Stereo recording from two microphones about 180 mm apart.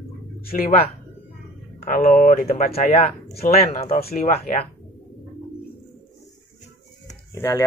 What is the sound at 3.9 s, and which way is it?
Speech, 55° left (ahead or behind).